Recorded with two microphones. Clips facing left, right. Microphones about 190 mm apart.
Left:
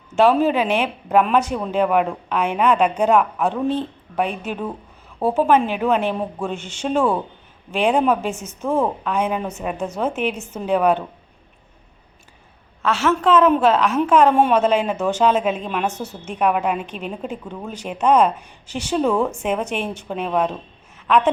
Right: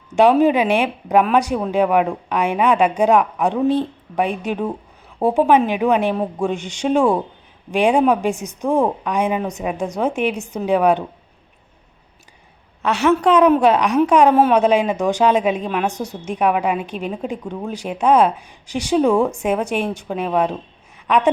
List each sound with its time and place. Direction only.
0.4 s a woman's voice: 10° right (ahead or behind)
12.8 s a woman's voice: 15° right (ahead or behind)